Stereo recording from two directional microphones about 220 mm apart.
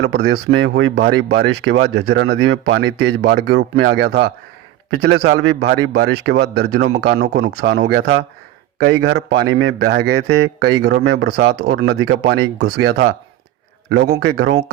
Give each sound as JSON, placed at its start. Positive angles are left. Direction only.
{"t": 0.0, "sound": "speech", "side_deg": -50}